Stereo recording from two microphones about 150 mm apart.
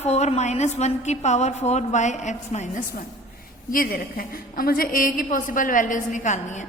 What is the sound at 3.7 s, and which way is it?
A woman's voice, 70° left (ahead or behind).